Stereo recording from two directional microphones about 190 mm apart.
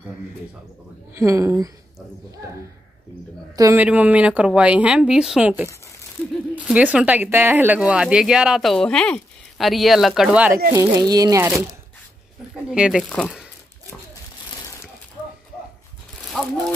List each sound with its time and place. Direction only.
1.1 s speech: 15° right (ahead or behind)
3.5 s speech: 15° right (ahead or behind)
10.7 s speech: 15° right (ahead or behind)
12.7 s speech: 5° right (ahead or behind)
16.3 s speech: 5° left (ahead or behind)